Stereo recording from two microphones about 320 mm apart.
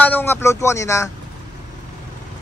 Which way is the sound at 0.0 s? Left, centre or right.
Centre.